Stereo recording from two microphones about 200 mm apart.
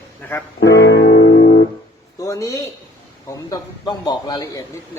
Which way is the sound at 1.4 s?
35° left (ahead or behind).